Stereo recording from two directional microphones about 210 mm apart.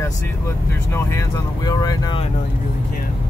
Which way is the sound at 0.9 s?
15° left (ahead or behind).